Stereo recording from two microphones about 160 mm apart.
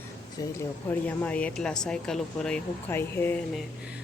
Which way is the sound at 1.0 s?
10° left (ahead or behind).